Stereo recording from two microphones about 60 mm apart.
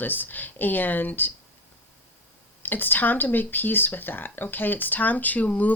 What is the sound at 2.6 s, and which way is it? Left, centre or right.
Speech, left.